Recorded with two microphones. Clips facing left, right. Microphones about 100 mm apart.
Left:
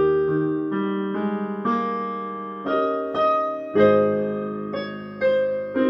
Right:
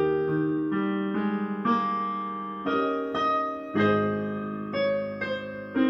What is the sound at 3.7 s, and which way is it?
Music, 15° left (ahead or behind).